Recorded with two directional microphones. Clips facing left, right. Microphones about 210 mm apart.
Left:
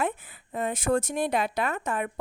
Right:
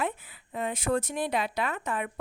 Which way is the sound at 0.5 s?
45° left (ahead or behind).